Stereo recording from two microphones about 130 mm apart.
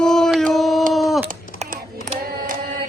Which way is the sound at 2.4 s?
90° right.